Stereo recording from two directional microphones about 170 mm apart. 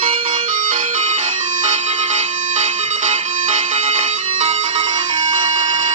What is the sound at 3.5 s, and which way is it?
Music, 40° right (ahead or behind).